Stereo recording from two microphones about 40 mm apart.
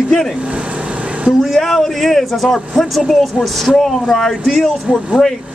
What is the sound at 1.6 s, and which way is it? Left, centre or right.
Speech, centre.